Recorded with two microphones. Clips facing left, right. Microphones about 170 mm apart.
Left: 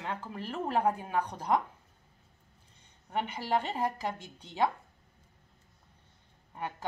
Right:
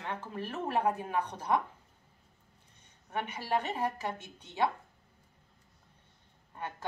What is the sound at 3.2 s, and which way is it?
Speech, 15° left (ahead or behind).